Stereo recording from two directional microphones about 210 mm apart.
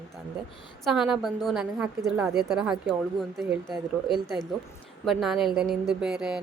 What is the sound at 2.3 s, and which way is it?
A woman's voice, centre (ahead or behind).